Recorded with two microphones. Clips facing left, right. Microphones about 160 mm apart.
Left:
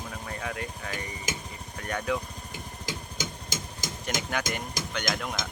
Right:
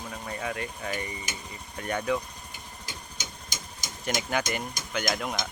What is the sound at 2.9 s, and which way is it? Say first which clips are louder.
Engine: left 8 dB; 90° left.